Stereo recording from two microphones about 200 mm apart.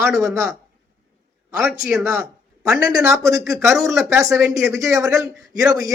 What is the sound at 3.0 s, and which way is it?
Speech, 15° right (ahead or behind).